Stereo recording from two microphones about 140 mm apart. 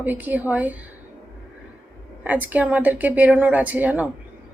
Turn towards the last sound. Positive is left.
turn(degrees=-10)  # may be behind; listen again after turning